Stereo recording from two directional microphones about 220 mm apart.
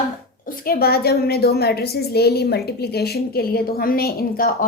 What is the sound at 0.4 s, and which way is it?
A woman's voice, 40° left (ahead or behind).